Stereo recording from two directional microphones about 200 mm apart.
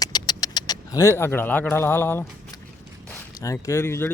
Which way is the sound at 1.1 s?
10° left (ahead or behind).